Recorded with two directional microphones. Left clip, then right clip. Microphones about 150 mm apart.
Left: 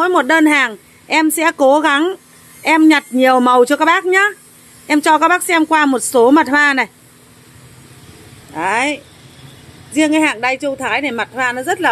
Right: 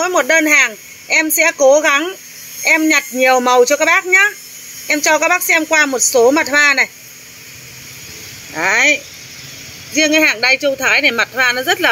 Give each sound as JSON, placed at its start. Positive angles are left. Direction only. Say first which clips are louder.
{"t": 0.0, "sound": "speech", "louder": "left 1 dB", "side_deg": 50}
{"t": 2.6, "sound": "speech", "louder": "left 1 dB", "side_deg": 45}
{"t": 8.5, "sound": "speech", "louder": "right 4 dB", "side_deg": 10}